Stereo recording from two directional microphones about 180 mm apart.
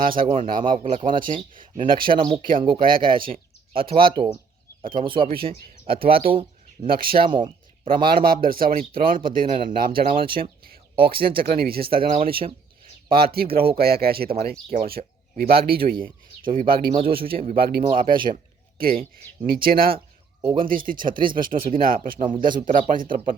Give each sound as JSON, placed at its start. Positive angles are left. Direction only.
{"t": 0.0, "sound": "speech", "side_deg": -50}
{"t": 1.3, "sound": "speech", "side_deg": -30}
{"t": 2.4, "sound": "speech", "side_deg": -50}
{"t": 4.8, "sound": "speech", "side_deg": -30}
{"t": 5.9, "sound": "speech", "side_deg": -55}
{"t": 7.2, "sound": "speech", "side_deg": -25}
{"t": 8.0, "sound": "speech", "side_deg": -55}
{"t": 17.8, "sound": "speech", "side_deg": -25}
{"t": 18.8, "sound": "speech", "side_deg": -55}
{"t": 20.4, "sound": "speech", "side_deg": -30}
{"t": 20.7, "sound": "speech", "side_deg": -50}